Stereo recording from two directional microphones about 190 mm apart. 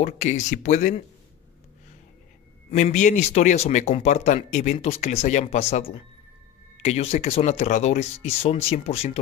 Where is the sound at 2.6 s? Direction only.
35° left (ahead or behind).